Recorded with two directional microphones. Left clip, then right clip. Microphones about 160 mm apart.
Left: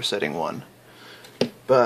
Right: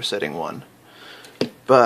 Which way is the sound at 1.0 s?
20° right (ahead or behind).